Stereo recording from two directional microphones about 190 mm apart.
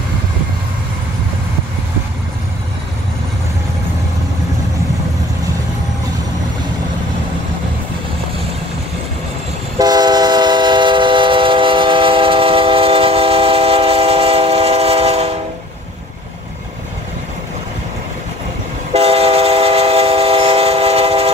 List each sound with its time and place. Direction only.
9.8 s train: 20° right (ahead or behind)
18.9 s train: 30° right (ahead or behind)